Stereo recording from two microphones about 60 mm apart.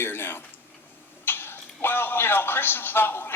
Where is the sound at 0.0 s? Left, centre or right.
Left.